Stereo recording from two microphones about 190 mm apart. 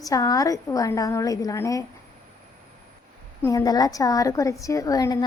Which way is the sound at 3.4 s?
20° left (ahead or behind).